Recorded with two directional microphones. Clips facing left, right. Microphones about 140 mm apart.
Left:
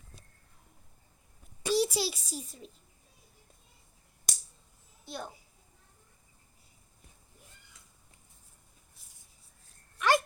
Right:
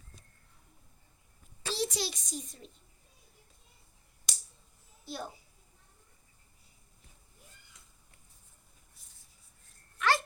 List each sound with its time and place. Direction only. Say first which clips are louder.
1.6 s a child's voice: left 6 dB; 10° left (ahead or behind)
5.0 s a child's voice: even; centre (ahead or behind)
10.0 s dog: left 3 dB; 15° left (ahead or behind)